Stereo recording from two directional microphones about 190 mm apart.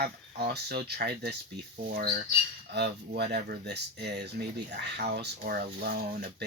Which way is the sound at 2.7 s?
60° right (ahead or behind).